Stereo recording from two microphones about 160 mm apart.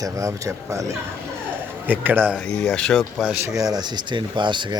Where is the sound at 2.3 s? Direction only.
5° left (ahead or behind).